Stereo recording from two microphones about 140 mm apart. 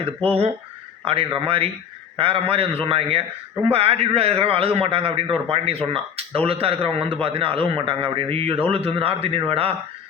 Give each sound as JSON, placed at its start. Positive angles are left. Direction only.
{"t": 1.0, "sound": "a man's voice", "side_deg": -40}